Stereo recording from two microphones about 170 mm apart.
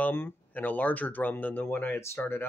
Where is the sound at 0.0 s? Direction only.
10° left (ahead or behind).